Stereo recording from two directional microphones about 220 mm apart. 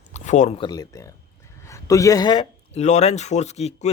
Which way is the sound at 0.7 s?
15° left (ahead or behind).